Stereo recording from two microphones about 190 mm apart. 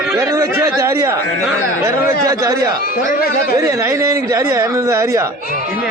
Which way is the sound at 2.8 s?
50° left (ahead or behind).